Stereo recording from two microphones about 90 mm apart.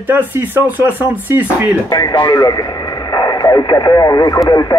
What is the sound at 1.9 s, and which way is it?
Speech, 45° left (ahead or behind).